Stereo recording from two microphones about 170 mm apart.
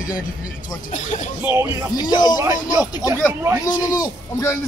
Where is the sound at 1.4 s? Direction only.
15° right (ahead or behind).